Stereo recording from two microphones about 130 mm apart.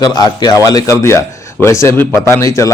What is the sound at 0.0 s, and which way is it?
A man's voice, 30° left (ahead or behind).